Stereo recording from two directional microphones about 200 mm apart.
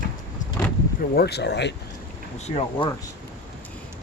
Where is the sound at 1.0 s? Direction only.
55° left (ahead or behind).